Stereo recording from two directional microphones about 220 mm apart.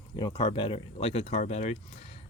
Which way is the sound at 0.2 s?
20° left (ahead or behind).